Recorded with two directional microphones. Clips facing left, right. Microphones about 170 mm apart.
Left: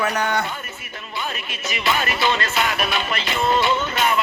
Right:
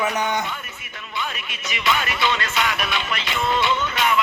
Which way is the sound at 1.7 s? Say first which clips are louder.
Left 1 dB; 40° left (ahead or behind).